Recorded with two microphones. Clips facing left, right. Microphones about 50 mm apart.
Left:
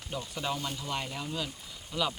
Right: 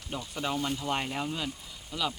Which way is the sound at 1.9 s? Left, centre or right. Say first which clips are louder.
Left 1 dB; centre.